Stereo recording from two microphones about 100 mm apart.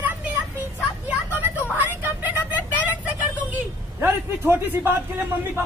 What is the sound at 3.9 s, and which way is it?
Speech, 25° right (ahead or behind).